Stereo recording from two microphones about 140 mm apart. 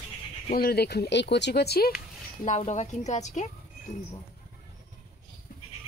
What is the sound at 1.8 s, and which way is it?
Speech, 90° left.